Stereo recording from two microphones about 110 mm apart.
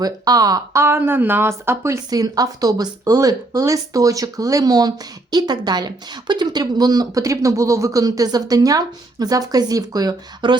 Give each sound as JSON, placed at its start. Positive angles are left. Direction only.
{"t": 0.0, "sound": "speech", "side_deg": -35}
{"t": 2.0, "sound": "speech", "side_deg": -35}